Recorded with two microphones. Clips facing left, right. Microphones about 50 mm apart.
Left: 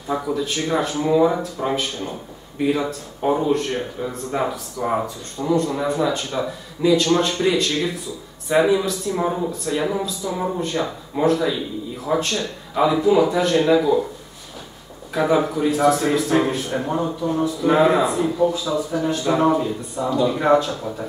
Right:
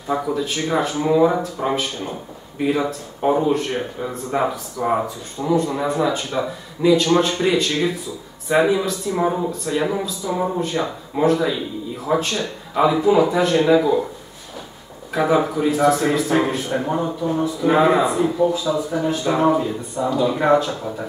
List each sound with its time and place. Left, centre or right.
0.1 s a man's voice: centre
15.1 s a man's voice: centre